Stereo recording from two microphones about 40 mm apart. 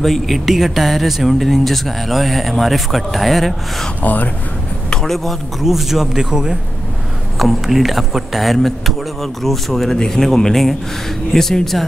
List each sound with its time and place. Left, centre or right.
0.0 s speech: centre
4.0 s speech: left
5.0 s a man's voice: centre
7.3 s speech: centre